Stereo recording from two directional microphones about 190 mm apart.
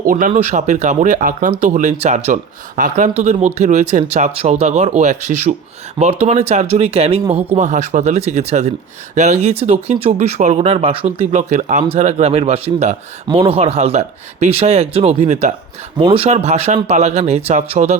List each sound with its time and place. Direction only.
0.0 s speech: 45° right (ahead or behind)